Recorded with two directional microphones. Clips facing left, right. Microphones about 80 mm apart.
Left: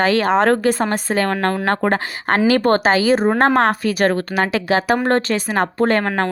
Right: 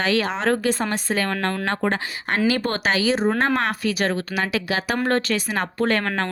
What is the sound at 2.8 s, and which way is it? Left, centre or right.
A woman's voice, left.